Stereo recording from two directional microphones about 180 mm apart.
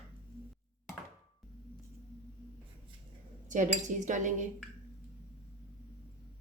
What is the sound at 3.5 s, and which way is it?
Speech, 45° right (ahead or behind).